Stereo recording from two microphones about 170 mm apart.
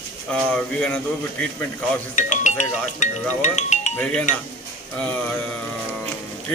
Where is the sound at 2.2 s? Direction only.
45° left (ahead or behind).